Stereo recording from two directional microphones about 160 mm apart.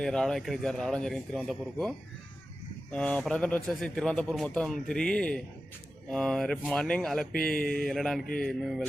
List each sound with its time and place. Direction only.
0.0 s a man's voice: 5° left (ahead or behind)
2.9 s a man's voice: 5° left (ahead or behind)
7.6 s speech: 65° left (ahead or behind)
7.9 s a man's voice: 5° left (ahead or behind)